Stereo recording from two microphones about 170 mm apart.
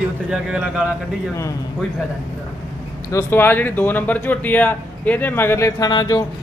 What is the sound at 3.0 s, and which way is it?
Speech, 15° left (ahead or behind).